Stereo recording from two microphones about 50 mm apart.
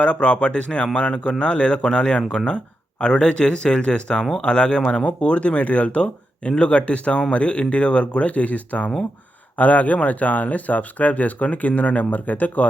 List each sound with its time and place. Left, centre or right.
0.0 s speech: left